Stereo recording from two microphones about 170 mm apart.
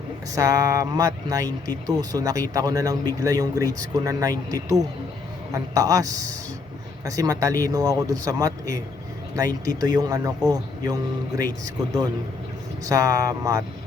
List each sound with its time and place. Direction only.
0.3 s speech: 20° right (ahead or behind)